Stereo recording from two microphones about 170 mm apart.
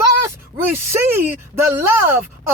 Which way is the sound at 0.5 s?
15° right (ahead or behind).